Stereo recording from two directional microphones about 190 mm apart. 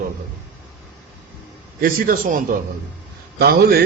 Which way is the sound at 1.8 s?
45° right (ahead or behind).